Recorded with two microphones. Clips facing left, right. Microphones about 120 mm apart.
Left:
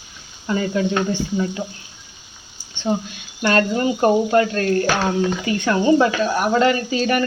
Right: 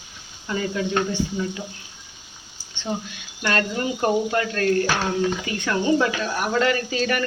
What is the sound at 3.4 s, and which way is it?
Speech, 35° left (ahead or behind).